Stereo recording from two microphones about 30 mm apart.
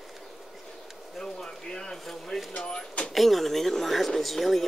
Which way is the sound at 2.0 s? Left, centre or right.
Centre.